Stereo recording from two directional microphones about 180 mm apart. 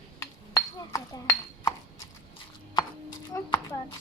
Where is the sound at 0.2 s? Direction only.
15° left (ahead or behind).